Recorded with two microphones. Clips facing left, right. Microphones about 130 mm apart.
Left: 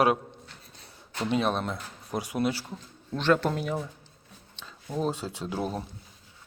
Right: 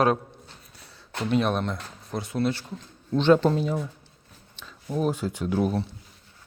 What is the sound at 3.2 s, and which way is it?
Speech, 25° right (ahead or behind).